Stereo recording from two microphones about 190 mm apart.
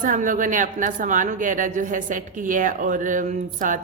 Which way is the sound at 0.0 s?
45° right (ahead or behind).